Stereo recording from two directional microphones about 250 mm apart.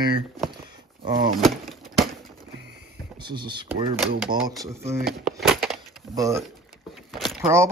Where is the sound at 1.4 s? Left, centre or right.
Centre.